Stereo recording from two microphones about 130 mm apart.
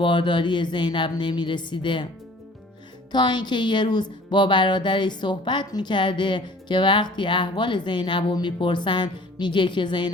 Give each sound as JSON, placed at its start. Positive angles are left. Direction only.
{"t": 0.0, "sound": "speech", "side_deg": 40}
{"t": 3.1, "sound": "speech", "side_deg": 35}